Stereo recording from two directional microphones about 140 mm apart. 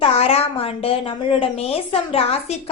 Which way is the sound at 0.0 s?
45° left (ahead or behind).